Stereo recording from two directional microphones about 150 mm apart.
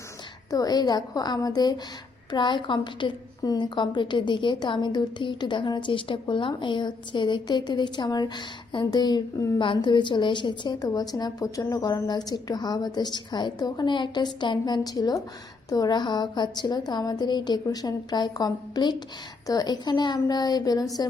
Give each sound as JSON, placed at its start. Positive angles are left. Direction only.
{"t": 0.5, "sound": "a woman's voice", "side_deg": 25}